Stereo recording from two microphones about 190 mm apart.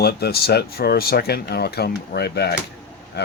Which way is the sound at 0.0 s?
60° left (ahead or behind).